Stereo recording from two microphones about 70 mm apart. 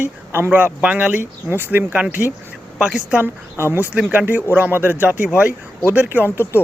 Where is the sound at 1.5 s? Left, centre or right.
Right.